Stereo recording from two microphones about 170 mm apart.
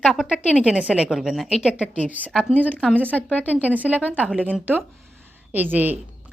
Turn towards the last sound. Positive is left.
turn(degrees=-10)  # may be behind; listen again after turning